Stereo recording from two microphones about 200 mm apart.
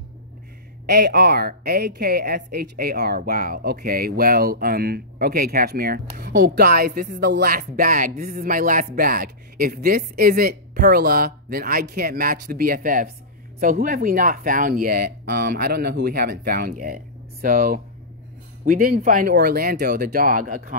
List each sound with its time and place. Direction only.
0.8 s speech: 55° right (ahead or behind)